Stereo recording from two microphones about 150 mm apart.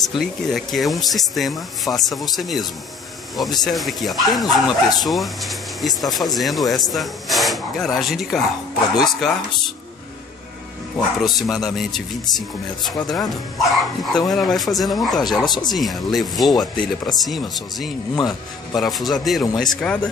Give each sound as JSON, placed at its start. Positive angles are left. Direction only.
{"t": 0.0, "sound": "speech", "side_deg": 0}
{"t": 11.2, "sound": "speech", "side_deg": 0}
{"t": 15.4, "sound": "speech", "side_deg": 30}
{"t": 15.7, "sound": "speech", "side_deg": 0}
{"t": 18.1, "sound": "speech", "side_deg": 25}
{"t": 18.8, "sound": "speech", "side_deg": 0}